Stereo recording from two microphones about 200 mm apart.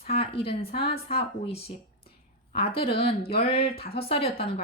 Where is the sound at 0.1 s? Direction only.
30° left (ahead or behind).